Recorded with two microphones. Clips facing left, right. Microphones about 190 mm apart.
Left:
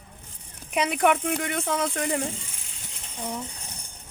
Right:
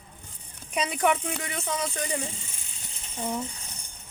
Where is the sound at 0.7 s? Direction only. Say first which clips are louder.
Left 3 dB; 60° left (ahead or behind).